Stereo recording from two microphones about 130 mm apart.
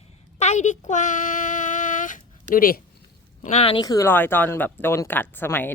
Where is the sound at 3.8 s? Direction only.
30° left (ahead or behind).